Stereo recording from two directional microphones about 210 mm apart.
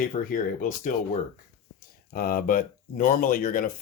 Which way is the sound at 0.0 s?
40° left (ahead or behind).